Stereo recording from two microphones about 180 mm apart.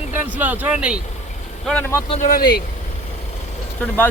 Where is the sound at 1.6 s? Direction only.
10° left (ahead or behind).